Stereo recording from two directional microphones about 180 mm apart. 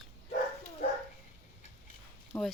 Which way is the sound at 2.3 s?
10° left (ahead or behind).